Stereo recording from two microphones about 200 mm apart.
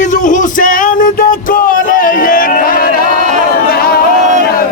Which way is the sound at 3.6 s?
50° left (ahead or behind).